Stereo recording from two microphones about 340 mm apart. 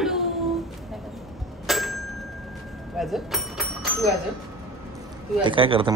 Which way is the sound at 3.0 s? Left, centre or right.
Centre.